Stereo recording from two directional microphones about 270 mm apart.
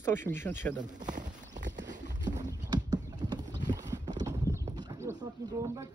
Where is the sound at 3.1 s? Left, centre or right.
Centre.